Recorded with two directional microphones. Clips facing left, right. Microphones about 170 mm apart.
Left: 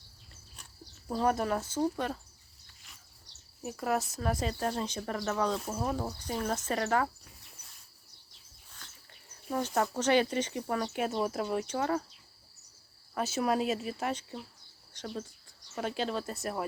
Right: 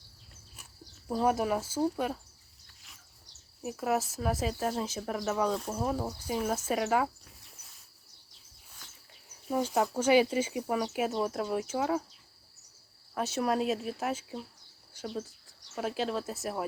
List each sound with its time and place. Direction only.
0.5 s speech: 5° right (ahead or behind)
3.6 s speech: 5° right (ahead or behind)
7.5 s a sound: centre (ahead or behind)
9.3 s speech: 10° right (ahead or behind)
13.1 s speech: centre (ahead or behind)